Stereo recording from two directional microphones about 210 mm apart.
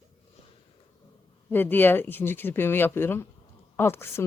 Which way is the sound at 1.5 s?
10° left (ahead or behind).